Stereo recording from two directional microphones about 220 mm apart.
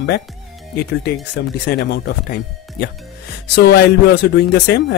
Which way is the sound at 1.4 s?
50° left (ahead or behind).